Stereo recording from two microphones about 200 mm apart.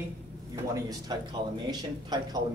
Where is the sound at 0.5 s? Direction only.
20° right (ahead or behind).